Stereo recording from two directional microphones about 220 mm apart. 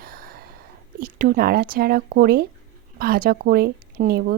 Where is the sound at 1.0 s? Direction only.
40° right (ahead or behind).